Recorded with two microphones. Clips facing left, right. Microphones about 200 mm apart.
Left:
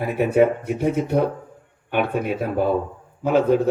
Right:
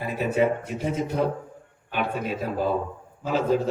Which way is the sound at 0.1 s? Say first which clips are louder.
Left 5 dB; 60° left (ahead or behind).